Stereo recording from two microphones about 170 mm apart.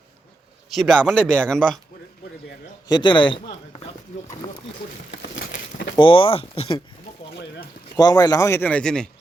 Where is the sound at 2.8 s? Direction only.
25° left (ahead or behind).